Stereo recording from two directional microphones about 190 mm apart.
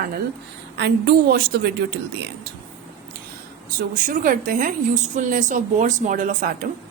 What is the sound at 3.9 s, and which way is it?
A woman's voice, 45° right (ahead or behind).